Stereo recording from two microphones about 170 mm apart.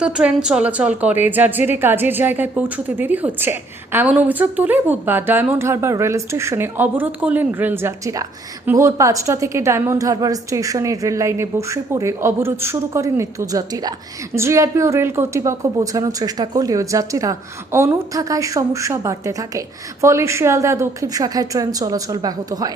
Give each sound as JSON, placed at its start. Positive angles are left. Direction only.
{"t": 0.0, "sound": "a woman's voice", "side_deg": -5}